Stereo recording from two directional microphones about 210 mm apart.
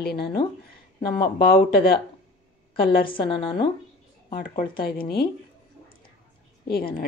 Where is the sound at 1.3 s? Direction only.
45° left (ahead or behind).